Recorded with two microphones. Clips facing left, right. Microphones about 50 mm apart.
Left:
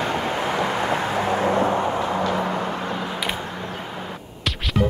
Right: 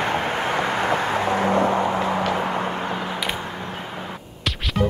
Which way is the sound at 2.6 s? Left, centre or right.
Right.